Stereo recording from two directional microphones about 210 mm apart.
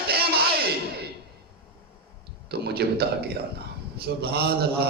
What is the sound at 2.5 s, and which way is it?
A man's voice, 50° right (ahead or behind).